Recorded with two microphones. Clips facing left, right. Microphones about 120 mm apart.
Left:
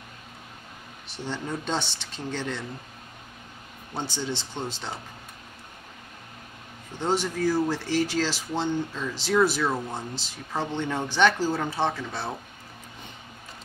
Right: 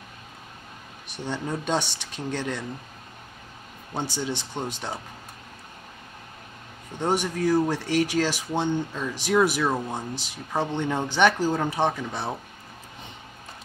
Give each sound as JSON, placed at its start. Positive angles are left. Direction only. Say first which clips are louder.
{"t": 1.1, "sound": "speech", "louder": "right 2 dB", "side_deg": -15}
{"t": 3.9, "sound": "speech", "louder": "right 2 dB", "side_deg": -15}
{"t": 7.0, "sound": "a man's voice", "louder": "right 1 dB", "side_deg": -15}